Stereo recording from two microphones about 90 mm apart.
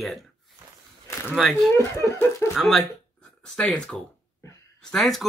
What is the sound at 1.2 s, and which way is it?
Speech, 5° right (ahead or behind).